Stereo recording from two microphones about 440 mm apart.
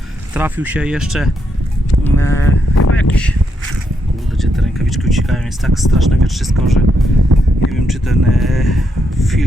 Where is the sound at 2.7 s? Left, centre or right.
Left.